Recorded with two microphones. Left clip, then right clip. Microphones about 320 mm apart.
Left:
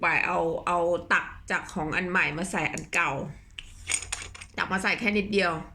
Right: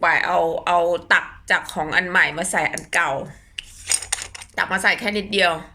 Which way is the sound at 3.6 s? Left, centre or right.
Centre.